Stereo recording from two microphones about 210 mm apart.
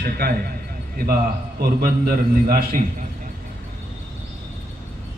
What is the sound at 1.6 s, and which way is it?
A man's voice, 45° right (ahead or behind).